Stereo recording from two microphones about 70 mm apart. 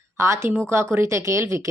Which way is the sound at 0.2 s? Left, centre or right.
Right.